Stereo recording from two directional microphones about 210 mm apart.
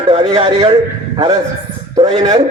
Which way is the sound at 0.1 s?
30° right (ahead or behind).